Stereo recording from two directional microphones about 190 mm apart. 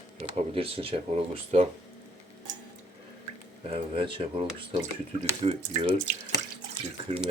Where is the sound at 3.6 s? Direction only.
30° right (ahead or behind).